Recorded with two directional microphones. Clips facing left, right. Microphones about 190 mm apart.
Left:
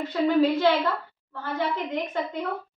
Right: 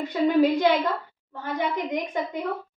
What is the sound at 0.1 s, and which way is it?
A woman's voice, 15° right (ahead or behind).